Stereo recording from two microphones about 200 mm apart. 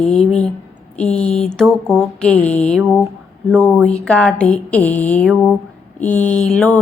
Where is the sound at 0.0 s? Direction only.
Centre (ahead or behind).